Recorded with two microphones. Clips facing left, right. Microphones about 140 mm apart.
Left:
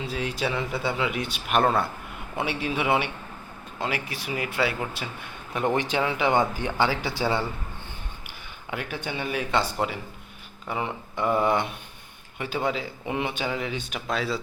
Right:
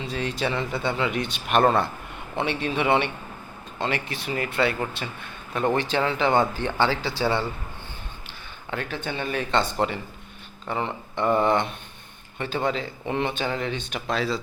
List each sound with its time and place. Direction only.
0.0 s a man's voice: 5° left (ahead or behind)
8.7 s speech: 10° left (ahead or behind)